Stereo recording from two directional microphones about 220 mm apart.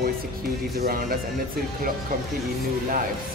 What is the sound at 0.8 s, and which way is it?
Speech, 40° right (ahead or behind).